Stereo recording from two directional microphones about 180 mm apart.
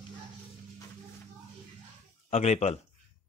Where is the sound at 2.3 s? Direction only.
35° left (ahead or behind).